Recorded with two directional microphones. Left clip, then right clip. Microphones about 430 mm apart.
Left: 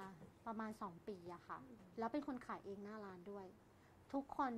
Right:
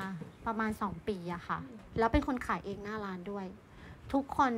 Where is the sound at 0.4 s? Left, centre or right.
Right.